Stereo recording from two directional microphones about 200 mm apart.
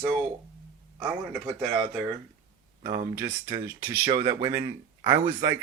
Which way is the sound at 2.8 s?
35° right (ahead or behind).